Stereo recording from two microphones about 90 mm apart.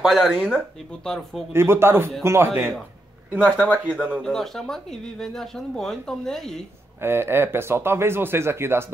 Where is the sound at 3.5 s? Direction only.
15° left (ahead or behind).